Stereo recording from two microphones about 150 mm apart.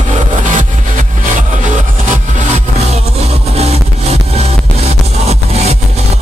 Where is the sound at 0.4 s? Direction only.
60° right (ahead or behind).